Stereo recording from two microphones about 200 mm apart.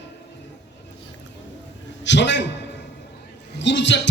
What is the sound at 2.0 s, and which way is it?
Speech, 60° left (ahead or behind).